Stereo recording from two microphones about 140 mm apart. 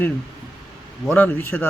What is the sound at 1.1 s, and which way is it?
Speech, 15° left (ahead or behind).